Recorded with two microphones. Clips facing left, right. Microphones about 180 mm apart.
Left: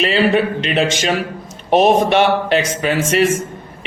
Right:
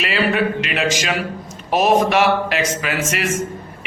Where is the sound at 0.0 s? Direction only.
30° left (ahead or behind).